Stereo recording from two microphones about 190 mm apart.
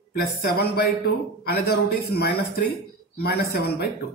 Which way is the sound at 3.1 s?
55° left (ahead or behind).